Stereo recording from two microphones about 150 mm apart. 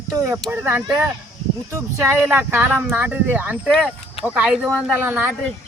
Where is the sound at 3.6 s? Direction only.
Centre (ahead or behind); by 5.3 s 15° right (ahead or behind).